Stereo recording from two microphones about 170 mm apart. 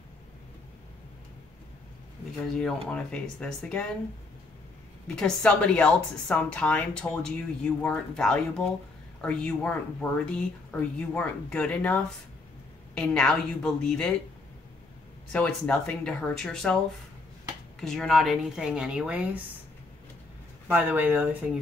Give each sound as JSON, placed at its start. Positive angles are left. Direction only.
{"t": 2.4, "sound": "a woman's voice", "side_deg": 5}
{"t": 5.0, "sound": "a woman's voice", "side_deg": 5}
{"t": 15.3, "sound": "a woman's voice", "side_deg": 5}
{"t": 17.7, "sound": "a woman's voice", "side_deg": 0}
{"t": 20.6, "sound": "speech", "side_deg": -10}